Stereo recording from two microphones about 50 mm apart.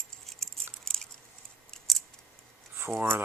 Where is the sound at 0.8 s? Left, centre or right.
Centre.